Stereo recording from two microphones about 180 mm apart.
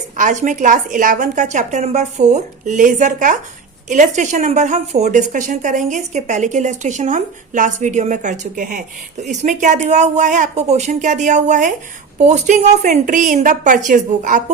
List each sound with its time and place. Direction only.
0.2 s a woman's voice: 45° right (ahead or behind)